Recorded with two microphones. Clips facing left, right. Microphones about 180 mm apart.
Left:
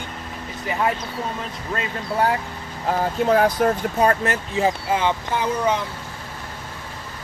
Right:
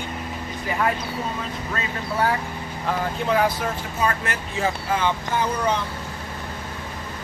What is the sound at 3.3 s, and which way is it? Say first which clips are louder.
Speech: left 5 dB; 50° left (ahead or behind).